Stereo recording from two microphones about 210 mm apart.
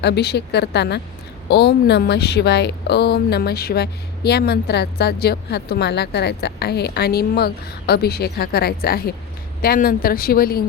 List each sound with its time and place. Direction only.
0.0 s speech: 50° left (ahead or behind)